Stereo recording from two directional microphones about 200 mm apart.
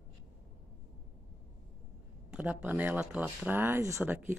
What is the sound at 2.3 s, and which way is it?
A woman's voice, 5° right (ahead or behind).